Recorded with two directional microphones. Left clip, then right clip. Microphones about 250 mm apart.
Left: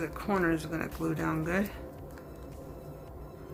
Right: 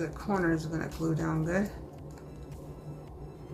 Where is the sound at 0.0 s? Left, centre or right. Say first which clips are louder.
Left 1 dB; left.